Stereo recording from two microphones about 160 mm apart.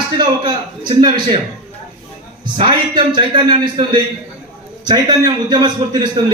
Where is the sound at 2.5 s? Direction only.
30° right (ahead or behind).